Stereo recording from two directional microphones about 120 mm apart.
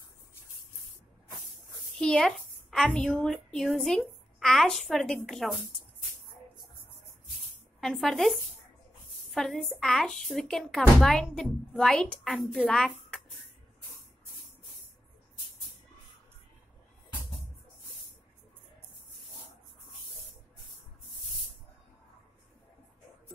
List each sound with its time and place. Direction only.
2.0 s a woman's voice: 5° left (ahead or behind)
7.8 s a woman's voice: 5° left (ahead or behind)